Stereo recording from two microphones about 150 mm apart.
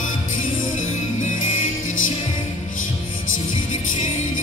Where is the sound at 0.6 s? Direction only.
55° left (ahead or behind).